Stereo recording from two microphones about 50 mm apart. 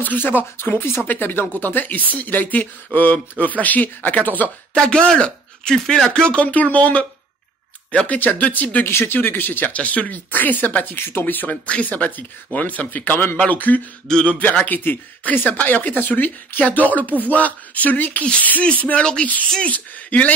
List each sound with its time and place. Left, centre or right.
0.0 s speech: left
4.7 s a man's voice: centre
6.3 s speech: left
8.8 s speech: left
11.6 s speech: left
13.5 s speech: left